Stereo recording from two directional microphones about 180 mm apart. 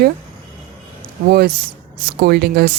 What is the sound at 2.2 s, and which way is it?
Speech, 65° right (ahead or behind).